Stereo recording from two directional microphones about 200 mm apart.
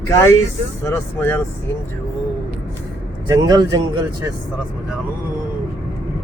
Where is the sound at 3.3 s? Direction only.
20° right (ahead or behind).